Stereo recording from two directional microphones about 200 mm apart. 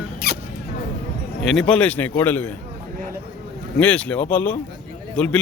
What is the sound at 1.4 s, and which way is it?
A man's voice, 5° left (ahead or behind).